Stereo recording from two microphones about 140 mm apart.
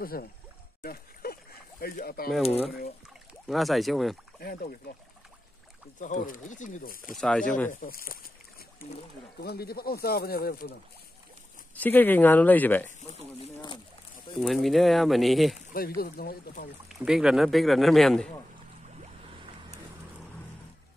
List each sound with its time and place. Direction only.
0.0 s speech: 90° left
3.4 s speech: centre (ahead or behind)
4.4 s speech: 90° left
5.9 s speech: 65° left (ahead or behind)
7.1 s speech: 5° left (ahead or behind)
7.7 s speech: 90° left
11.8 s speech: 15° left (ahead or behind)
13.0 s speech: 50° left (ahead or behind)
14.3 s speech: centre (ahead or behind)
16.0 s speech: 90° left
17.0 s speech: 5° right (ahead or behind)